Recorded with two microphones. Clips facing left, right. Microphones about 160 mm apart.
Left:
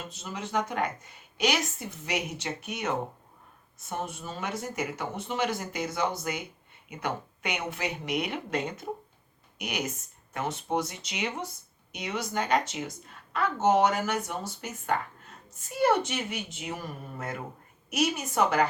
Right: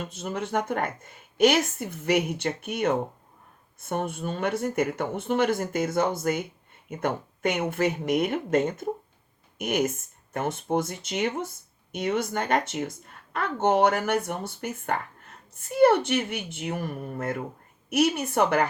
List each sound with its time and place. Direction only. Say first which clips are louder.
0.1 s a woman's voice: right 2 dB; 55° right (ahead or behind)